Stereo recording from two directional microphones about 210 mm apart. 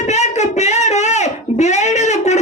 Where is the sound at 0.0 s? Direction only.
35° left (ahead or behind).